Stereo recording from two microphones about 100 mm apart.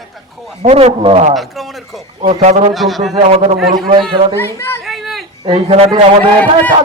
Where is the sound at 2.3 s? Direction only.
75° right (ahead or behind).